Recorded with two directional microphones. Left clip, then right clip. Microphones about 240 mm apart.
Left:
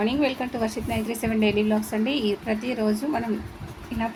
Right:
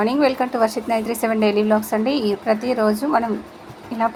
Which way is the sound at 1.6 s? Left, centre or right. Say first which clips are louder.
Right 7 dB; centre.